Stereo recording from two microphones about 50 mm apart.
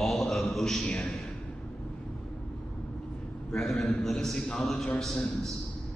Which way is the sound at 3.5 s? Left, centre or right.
Centre.